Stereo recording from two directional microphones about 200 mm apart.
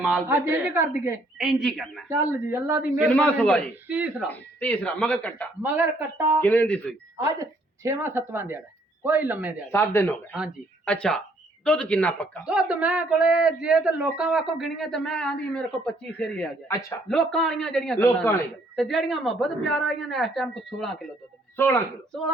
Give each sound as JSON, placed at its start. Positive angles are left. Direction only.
{"t": 0.0, "sound": "a woman's voice", "side_deg": -5}
{"t": 1.5, "sound": "speech", "side_deg": 0}
{"t": 2.0, "sound": "a woman's voice", "side_deg": -10}
{"t": 3.0, "sound": "speech", "side_deg": 5}
{"t": 3.8, "sound": "a woman's voice", "side_deg": -5}
{"t": 4.3, "sound": "speech", "side_deg": 10}
{"t": 5.6, "sound": "a woman's voice", "side_deg": -10}
{"t": 6.4, "sound": "speech", "side_deg": 10}
{"t": 7.2, "sound": "a woman's voice", "side_deg": -15}
{"t": 9.7, "sound": "speech", "side_deg": 10}
{"t": 12.5, "sound": "speech", "side_deg": -5}
{"t": 18.8, "sound": "speech", "side_deg": 0}
{"t": 21.5, "sound": "speech", "side_deg": 10}